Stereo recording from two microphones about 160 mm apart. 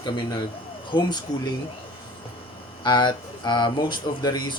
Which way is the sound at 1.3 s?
25° left (ahead or behind).